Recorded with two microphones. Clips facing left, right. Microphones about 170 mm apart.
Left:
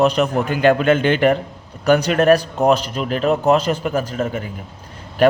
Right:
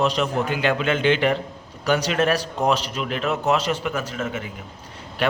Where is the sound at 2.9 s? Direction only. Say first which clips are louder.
Left 6 dB; 40° left (ahead or behind).